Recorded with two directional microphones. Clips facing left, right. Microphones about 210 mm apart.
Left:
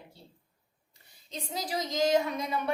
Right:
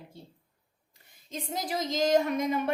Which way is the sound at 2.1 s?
45° right (ahead or behind).